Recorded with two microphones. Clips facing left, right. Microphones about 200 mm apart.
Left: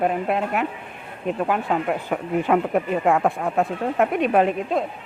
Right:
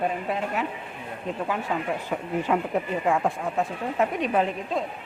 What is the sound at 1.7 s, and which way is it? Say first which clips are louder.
A woman's voice: left 5 dB; 70° left (ahead or behind).